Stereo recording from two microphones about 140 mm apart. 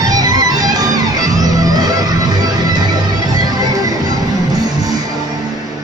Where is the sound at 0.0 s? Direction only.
25° right (ahead or behind).